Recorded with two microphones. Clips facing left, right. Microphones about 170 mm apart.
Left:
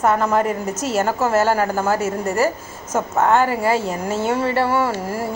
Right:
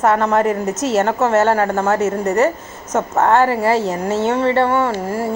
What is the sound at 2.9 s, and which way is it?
Speech, 25° right (ahead or behind).